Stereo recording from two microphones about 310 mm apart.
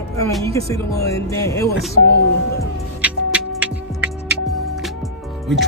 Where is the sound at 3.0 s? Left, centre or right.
Centre.